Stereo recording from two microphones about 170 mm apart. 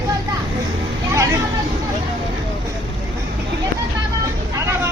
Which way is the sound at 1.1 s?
15° right (ahead or behind).